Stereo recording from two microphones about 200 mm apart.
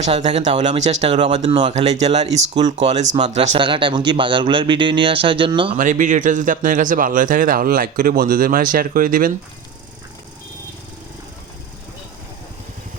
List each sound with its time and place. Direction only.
0.0 s speech: 35° right (ahead or behind)
5.7 s speech: 40° right (ahead or behind)